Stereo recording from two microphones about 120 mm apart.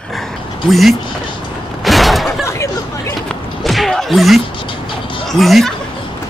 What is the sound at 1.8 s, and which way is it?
Mechanisms, centre (ahead or behind).